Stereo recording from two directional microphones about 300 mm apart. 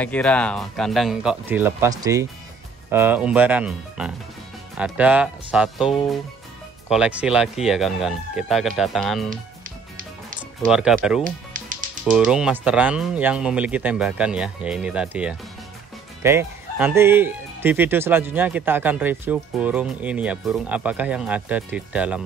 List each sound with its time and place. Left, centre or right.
0.0 s speech: centre
10.7 s speech: centre
11.2 s music: right
12.3 s speech: centre